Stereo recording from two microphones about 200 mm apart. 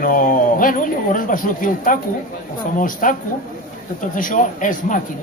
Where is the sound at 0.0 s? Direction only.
45° left (ahead or behind).